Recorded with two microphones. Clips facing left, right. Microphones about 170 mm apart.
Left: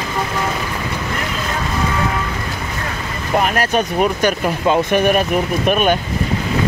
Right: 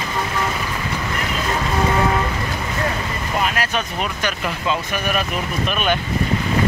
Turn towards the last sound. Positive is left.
turn(degrees=45)  # may be behind; listen again after turning